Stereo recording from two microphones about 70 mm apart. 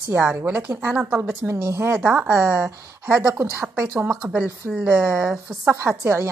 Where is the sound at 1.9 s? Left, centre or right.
Right.